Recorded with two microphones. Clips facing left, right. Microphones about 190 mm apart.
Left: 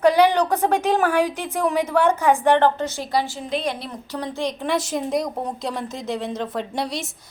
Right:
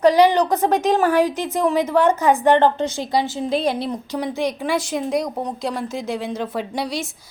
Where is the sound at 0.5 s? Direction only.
10° left (ahead or behind).